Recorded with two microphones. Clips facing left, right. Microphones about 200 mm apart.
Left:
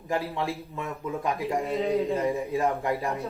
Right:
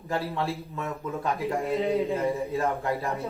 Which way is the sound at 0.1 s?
15° left (ahead or behind).